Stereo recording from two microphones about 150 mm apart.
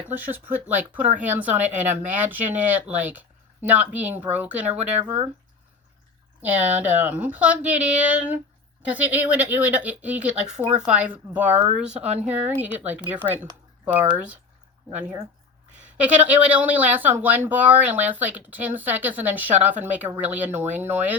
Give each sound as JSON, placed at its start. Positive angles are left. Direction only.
{"t": 0.1, "sound": "speech", "side_deg": -10}
{"t": 6.4, "sound": "speech", "side_deg": -10}
{"t": 10.9, "sound": "speech", "side_deg": -10}
{"t": 16.0, "sound": "speech", "side_deg": -10}